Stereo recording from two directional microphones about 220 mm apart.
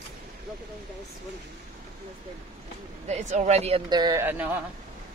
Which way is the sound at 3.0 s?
30° right (ahead or behind).